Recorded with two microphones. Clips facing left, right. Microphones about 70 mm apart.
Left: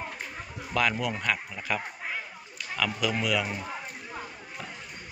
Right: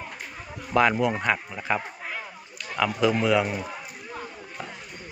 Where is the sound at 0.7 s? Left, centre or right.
Right.